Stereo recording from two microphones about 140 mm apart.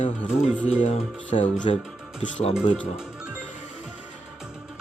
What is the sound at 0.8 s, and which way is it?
Speech, 55° left (ahead or behind).